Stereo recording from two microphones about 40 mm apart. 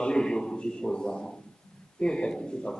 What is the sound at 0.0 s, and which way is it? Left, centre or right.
A man's voice, centre.